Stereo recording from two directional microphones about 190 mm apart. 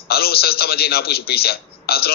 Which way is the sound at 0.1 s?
55° left (ahead or behind).